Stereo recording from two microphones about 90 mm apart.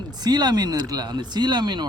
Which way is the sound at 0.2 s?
50° right (ahead or behind).